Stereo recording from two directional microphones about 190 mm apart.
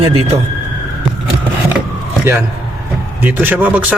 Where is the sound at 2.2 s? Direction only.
10° right (ahead or behind).